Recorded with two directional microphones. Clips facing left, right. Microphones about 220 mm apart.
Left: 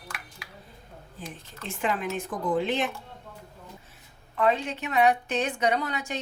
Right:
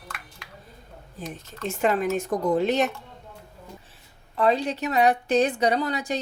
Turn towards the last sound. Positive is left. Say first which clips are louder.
# right 3 dB
turn(degrees=-35)  # may be behind; listen again after turning